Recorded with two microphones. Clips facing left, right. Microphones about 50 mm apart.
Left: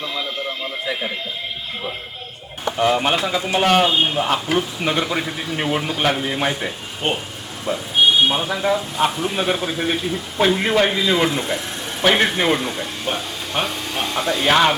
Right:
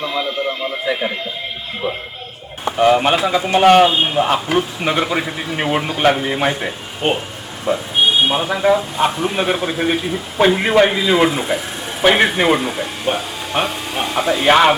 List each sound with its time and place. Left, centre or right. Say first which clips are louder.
0.0 s a man's voice: right 5 dB; centre
2.8 s a man's voice: right 5 dB; centre